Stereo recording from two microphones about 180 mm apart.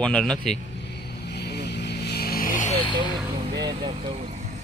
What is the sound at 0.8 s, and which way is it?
Vehicle, 70° left (ahead or behind).